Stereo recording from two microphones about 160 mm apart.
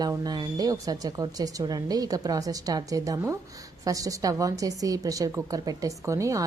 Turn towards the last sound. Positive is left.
turn(degrees=-20)  # may be behind; listen again after turning